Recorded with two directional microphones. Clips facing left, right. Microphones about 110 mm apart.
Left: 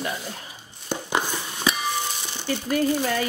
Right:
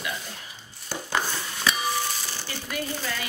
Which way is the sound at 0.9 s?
15° left (ahead or behind).